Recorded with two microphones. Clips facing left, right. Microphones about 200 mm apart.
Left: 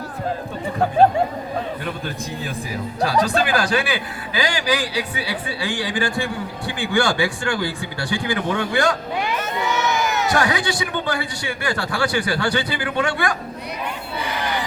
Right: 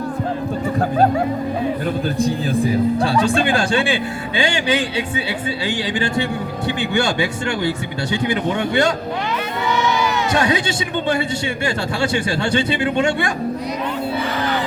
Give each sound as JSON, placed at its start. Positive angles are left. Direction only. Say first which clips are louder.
{"t": 2.1, "sound": "a man's voice", "louder": "right 10 dB", "side_deg": -30}
{"t": 9.6, "sound": "crowd", "louder": "right 3 dB", "side_deg": 45}
{"t": 10.3, "sound": "a man's voice", "louder": "right 3 dB", "side_deg": -25}